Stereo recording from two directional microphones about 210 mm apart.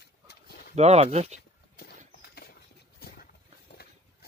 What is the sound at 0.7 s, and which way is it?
Speech, 30° right (ahead or behind).